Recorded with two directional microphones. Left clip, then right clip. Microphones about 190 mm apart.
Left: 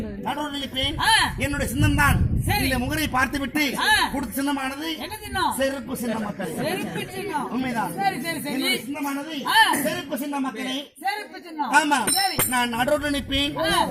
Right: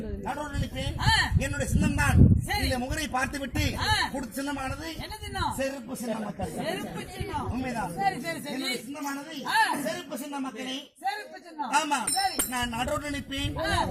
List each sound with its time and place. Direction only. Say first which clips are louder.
0.8 s speech: left 6 dB; 10° right (ahead or behind)
7.3 s speech: left 6 dB; 10° right (ahead or behind)
11.7 s speech: left 7 dB; 15° right (ahead or behind)
13.6 s speech: left 5 dB; 5° right (ahead or behind)